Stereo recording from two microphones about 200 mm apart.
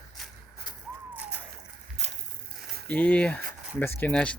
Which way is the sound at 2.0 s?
35° right (ahead or behind).